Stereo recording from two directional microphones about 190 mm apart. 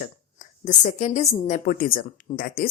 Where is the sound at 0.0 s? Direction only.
40° left (ahead or behind).